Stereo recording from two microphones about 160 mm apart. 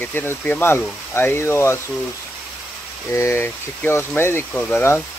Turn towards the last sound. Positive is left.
turn(degrees=15)  # may be behind; listen again after turning